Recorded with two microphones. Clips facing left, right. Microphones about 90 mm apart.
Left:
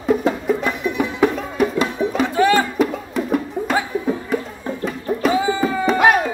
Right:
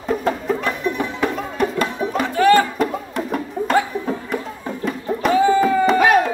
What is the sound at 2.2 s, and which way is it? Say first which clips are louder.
Music: right 2 dB; 20° left (ahead or behind).